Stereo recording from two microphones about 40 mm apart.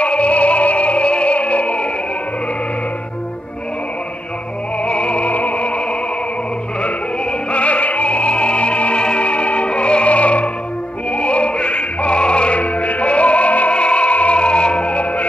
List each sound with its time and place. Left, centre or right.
0.0 s music: left
4.8 s opera: left
7.5 s opera: left
11.1 s music: left